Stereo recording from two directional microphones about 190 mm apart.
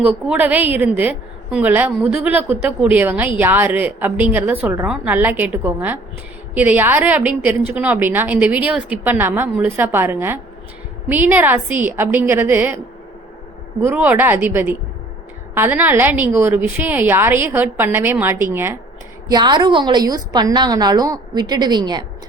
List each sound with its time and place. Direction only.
0.0 s a woman's voice: 5° right (ahead or behind)
13.8 s a woman's voice: 10° right (ahead or behind)
19.3 s a woman's voice: 25° right (ahead or behind)